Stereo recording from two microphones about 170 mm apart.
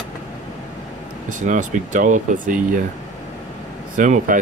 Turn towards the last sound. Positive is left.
turn(degrees=-50)  # may be behind; listen again after turning